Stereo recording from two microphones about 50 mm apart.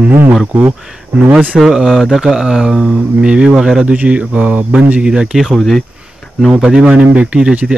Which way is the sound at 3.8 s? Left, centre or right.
Right.